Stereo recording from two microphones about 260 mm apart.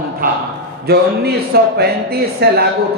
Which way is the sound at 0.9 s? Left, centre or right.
Right.